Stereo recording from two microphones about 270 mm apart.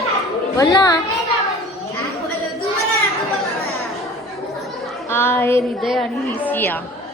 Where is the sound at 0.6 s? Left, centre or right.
Centre.